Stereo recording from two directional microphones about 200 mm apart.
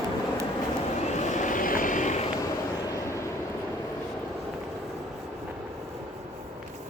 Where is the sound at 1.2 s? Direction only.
35° left (ahead or behind).